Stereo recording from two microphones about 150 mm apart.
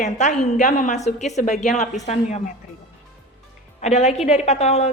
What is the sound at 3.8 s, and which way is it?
A woman's voice, 45° left (ahead or behind).